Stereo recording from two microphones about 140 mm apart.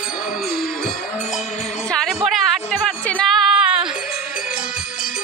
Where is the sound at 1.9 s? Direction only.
Centre (ahead or behind).